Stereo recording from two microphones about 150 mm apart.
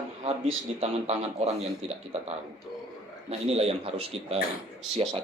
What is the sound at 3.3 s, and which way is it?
Speech, 40° right (ahead or behind).